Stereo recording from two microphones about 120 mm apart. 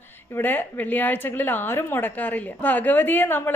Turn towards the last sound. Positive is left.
turn(degrees=15)  # may be behind; listen again after turning